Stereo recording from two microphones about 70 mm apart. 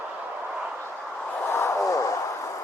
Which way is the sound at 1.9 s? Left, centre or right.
Left.